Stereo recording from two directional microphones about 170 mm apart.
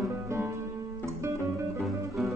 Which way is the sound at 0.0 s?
15° right (ahead or behind).